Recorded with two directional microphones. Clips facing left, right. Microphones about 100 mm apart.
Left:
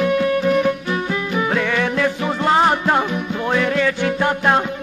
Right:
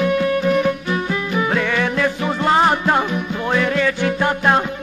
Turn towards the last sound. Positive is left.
turn(degrees=25)  # may be behind; listen again after turning